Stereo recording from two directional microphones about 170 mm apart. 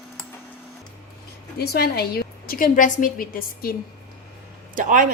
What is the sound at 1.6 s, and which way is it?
A woman's voice, 70° left (ahead or behind).